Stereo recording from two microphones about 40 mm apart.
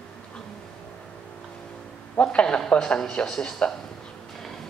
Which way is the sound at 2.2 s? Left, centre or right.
Left.